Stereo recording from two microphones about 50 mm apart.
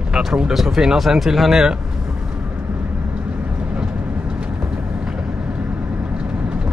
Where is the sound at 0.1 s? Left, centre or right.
Centre.